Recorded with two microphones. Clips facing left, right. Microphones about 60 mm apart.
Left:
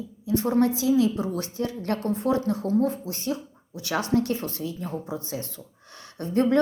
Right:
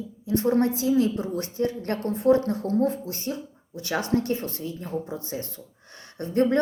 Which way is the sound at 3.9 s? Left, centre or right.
Right.